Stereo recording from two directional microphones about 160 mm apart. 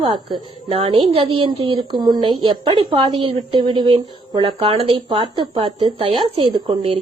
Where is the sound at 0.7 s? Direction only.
40° right (ahead or behind).